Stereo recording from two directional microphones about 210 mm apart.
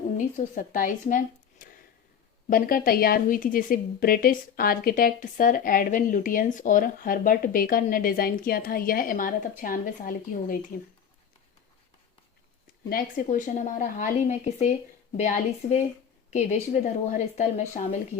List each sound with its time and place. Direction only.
0.3 s a woman's voice: 40° left (ahead or behind)
12.9 s a woman's voice: 40° left (ahead or behind)